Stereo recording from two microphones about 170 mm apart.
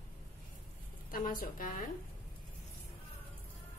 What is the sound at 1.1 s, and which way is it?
Speech, 55° left (ahead or behind).